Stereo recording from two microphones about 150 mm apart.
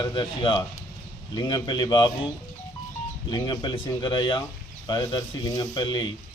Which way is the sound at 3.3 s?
30° left (ahead or behind).